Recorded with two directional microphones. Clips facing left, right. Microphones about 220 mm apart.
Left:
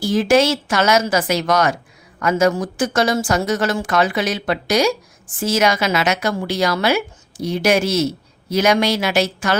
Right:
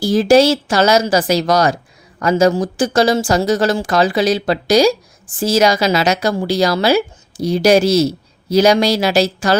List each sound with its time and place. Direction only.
0.0 s a woman's voice: 35° right (ahead or behind)